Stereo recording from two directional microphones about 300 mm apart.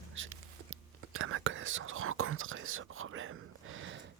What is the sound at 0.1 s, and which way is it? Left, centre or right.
Speech, right.